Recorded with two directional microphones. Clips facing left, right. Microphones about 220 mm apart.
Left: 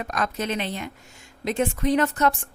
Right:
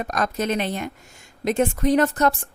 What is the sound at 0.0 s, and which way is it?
A woman's voice, 40° right (ahead or behind).